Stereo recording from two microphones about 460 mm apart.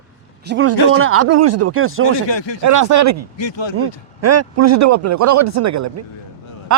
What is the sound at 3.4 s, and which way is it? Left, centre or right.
Speech, left.